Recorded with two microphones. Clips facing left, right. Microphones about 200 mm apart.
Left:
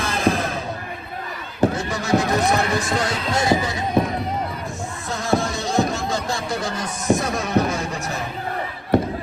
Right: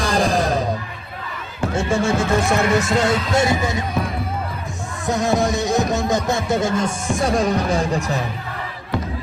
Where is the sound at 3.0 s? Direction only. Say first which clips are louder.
Right 4 dB; 25° right (ahead or behind).